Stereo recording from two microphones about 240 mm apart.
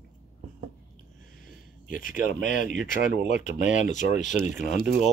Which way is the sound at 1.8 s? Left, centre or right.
Left.